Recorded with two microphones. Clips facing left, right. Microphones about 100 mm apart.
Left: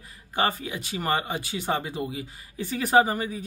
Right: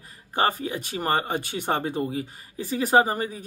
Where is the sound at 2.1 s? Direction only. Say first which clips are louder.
Right 5 dB; 35° right (ahead or behind).